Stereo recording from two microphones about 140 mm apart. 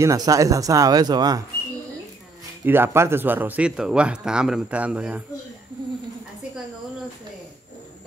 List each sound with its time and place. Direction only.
0.0 s speech: 25° right (ahead or behind)
2.6 s speech: 15° right (ahead or behind)